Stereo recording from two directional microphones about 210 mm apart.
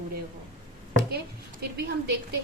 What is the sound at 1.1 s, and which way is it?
A woman's voice, 50° right (ahead or behind).